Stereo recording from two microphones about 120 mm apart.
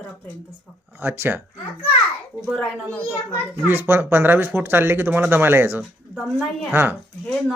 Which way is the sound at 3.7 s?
15° right (ahead or behind).